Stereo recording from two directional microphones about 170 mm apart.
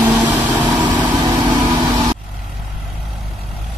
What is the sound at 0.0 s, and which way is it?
Vehicle, 10° right (ahead or behind).